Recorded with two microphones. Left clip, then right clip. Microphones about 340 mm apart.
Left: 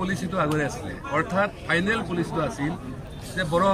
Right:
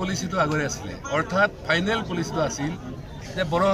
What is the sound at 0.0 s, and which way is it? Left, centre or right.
A man's voice, centre.